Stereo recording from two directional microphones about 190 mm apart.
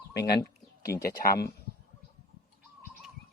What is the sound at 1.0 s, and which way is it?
Speech, 50° left (ahead or behind).